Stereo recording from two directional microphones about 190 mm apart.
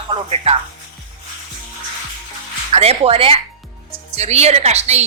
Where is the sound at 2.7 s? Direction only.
30° right (ahead or behind).